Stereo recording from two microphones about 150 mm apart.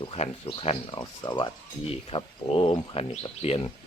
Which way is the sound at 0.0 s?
40° left (ahead or behind).